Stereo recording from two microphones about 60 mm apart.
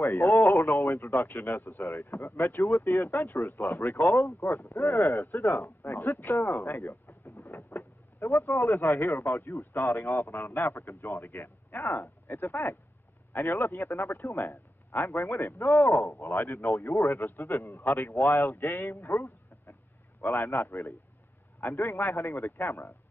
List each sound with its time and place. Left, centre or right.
0.1 s a man's voice: left
6.1 s speech: left
6.4 s speech: left
7.1 s a sound: left
7.5 s speech: left
9.4 s speech: left
9.8 s a man's voice: left
17.6 s a man's voice: left
18.7 s speech: left
20.2 s a man's voice: left